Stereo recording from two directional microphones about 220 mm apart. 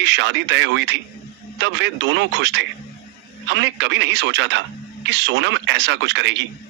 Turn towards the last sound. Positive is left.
turn(degrees=-55)  # may be behind; listen again after turning